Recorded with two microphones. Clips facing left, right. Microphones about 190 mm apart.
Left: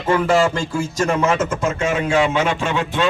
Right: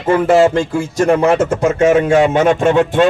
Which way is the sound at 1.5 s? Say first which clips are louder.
Right 8 dB; 70° right (ahead or behind).